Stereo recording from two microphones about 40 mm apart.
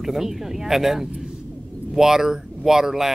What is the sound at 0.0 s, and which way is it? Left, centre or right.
Speech, centre.